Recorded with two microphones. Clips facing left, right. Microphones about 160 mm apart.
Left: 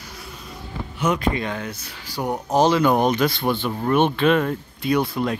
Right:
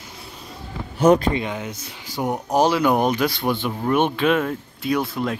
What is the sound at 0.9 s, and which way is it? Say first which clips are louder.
Speech: right 8 dB; 40° right (ahead or behind).